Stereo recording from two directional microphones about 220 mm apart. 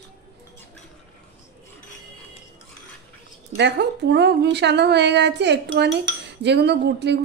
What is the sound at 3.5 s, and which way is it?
A woman's voice, 50° right (ahead or behind).